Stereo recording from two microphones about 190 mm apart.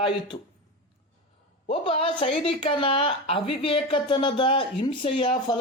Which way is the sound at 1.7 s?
30° left (ahead or behind).